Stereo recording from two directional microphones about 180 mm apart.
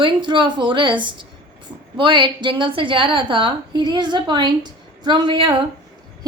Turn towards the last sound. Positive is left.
turn(degrees=-25)  # may be behind; listen again after turning